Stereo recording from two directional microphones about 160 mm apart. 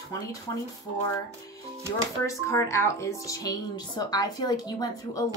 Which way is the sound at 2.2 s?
20° left (ahead or behind).